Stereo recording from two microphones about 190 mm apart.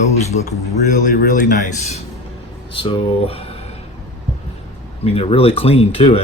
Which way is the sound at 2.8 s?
30° left (ahead or behind).